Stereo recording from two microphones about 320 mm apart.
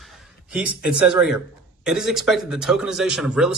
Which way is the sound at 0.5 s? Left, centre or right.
Centre.